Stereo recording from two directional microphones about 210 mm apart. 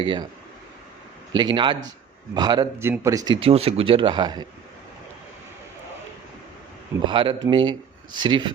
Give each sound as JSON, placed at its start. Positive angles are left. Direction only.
{"t": 0.0, "sound": "speech", "side_deg": -20}
{"t": 1.4, "sound": "speech", "side_deg": -20}
{"t": 7.0, "sound": "speech", "side_deg": -25}